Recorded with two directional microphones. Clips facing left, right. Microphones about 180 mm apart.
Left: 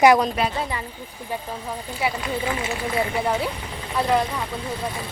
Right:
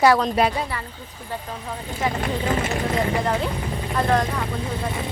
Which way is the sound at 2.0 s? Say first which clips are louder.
Right 1 dB; 10° left (ahead or behind).